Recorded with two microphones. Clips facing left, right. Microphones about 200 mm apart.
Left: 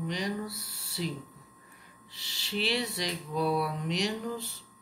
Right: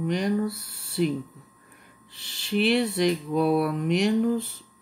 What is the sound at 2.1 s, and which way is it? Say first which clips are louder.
Mantra: right 9 dB; 55° right (ahead or behind).